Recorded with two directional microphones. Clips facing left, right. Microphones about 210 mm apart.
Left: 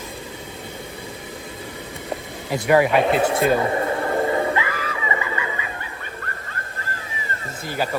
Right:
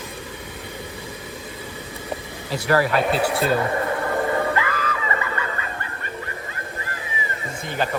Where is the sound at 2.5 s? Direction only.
15° left (ahead or behind).